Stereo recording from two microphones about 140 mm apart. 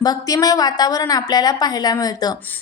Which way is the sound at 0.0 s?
25° left (ahead or behind).